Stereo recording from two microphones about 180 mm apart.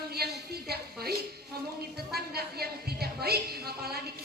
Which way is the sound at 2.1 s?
60° right (ahead or behind).